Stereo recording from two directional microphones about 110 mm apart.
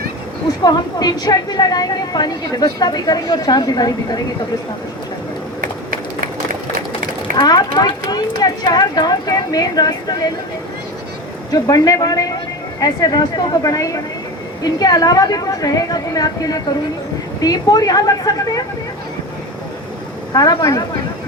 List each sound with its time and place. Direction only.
0.6 s a woman's voice: 40° left (ahead or behind)
7.3 s a woman's voice: 40° left (ahead or behind)
11.5 s a woman's voice: 35° left (ahead or behind)
20.3 s a woman's voice: 35° left (ahead or behind)